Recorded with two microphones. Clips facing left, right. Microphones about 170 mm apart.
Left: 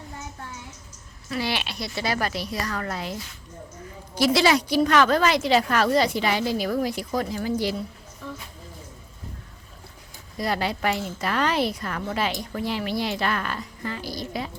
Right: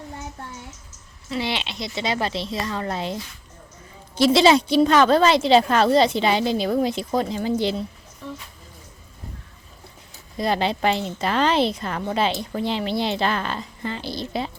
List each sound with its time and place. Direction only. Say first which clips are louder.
1.3 s a woman's voice: right 1 dB; 25° right (ahead or behind)
10.3 s a woman's voice: right 4 dB; 25° right (ahead or behind)